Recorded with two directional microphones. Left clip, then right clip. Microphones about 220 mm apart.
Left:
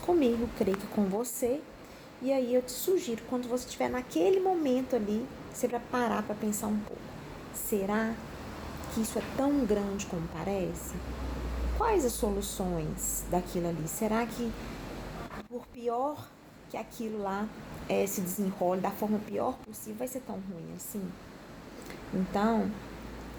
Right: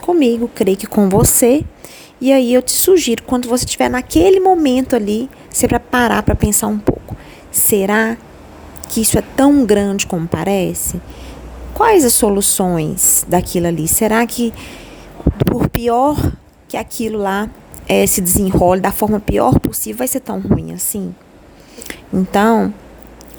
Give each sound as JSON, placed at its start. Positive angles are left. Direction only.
{"t": 0.0, "sound": "a woman's voice", "side_deg": -40}
{"t": 7.7, "sound": "a woman's voice", "side_deg": -50}
{"t": 11.8, "sound": "a woman's voice", "side_deg": -45}
{"t": 15.8, "sound": "a woman's voice", "side_deg": -50}